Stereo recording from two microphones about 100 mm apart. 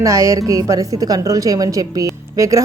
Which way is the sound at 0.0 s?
30° right (ahead or behind).